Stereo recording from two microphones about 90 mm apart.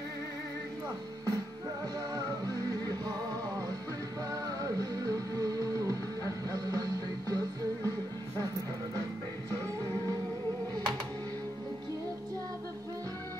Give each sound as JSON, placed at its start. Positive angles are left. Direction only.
{"t": 2.1, "sound": "music", "side_deg": -40}